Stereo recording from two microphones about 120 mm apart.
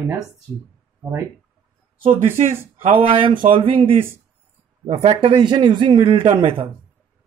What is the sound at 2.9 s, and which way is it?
A man's voice, 45° right (ahead or behind).